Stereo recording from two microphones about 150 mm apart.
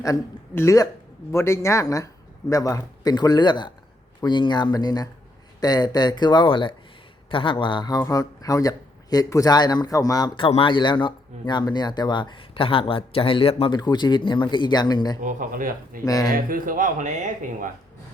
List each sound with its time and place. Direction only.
0.0 s a man's voice: 20° left (ahead or behind); by 13.7 s 40° left (ahead or behind)
13.7 s a man's voice: 30° left (ahead or behind)
15.2 s speech: 60° right (ahead or behind)
16.0 s a man's voice: 25° left (ahead or behind)
16.3 s speech: 70° right (ahead or behind)